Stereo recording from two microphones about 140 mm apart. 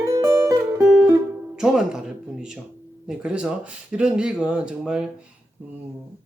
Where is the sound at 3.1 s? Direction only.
5° right (ahead or behind).